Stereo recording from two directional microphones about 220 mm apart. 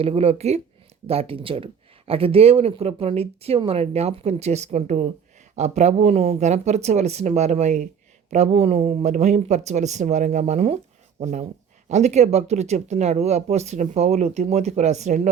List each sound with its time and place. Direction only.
0.0 s speech: 25° right (ahead or behind)